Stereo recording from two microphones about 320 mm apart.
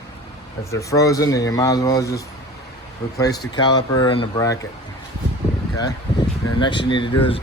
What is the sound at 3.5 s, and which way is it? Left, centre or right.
Speech, centre.